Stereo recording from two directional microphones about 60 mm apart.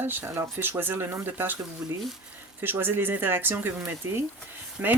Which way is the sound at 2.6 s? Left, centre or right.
Right.